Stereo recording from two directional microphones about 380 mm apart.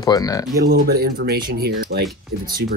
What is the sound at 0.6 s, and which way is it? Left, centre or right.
Speech, right.